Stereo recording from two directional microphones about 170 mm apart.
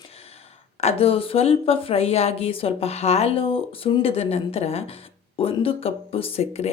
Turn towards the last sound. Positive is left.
turn(degrees=35)  # may be behind; listen again after turning